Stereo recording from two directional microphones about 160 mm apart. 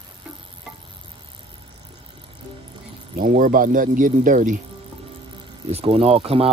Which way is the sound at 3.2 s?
60° right (ahead or behind).